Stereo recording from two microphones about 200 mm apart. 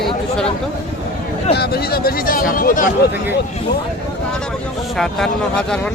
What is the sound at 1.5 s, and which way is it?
Speech, 50° left (ahead or behind).